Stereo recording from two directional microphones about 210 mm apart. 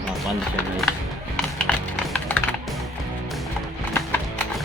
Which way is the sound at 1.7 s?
5° left (ahead or behind).